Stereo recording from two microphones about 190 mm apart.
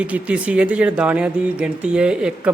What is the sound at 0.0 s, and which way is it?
Speech, 5° right (ahead or behind).